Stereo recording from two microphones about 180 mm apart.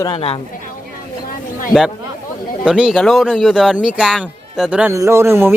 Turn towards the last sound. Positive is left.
turn(degrees=-15)  # may be behind; listen again after turning